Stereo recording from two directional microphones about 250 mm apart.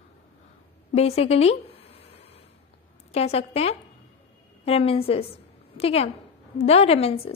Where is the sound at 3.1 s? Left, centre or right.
Left.